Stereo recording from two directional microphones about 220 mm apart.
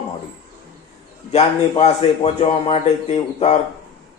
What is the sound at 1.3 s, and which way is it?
A man's voice, 30° left (ahead or behind).